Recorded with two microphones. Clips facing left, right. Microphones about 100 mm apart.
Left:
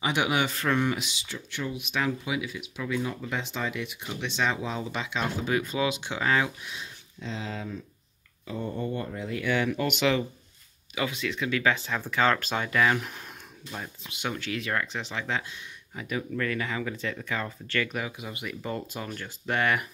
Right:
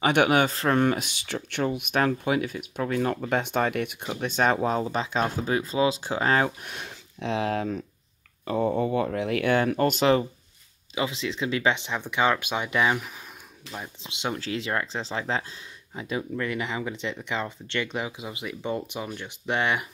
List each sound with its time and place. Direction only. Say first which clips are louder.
0.0 s speech: right 6 dB; 55° right (ahead or behind)
8.5 s speech: right 8 dB; 90° right; by 9.5 s 75° right (ahead or behind)
9.5 s speech: right 3 dB; 50° right (ahead or behind)
11.0 s speech: right 2 dB; 25° right (ahead or behind)
14.0 s speech: right 3 dB; 25° right (ahead or behind)